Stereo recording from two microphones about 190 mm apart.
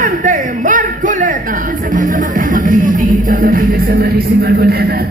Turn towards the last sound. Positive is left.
turn(degrees=-55)  # may be behind; listen again after turning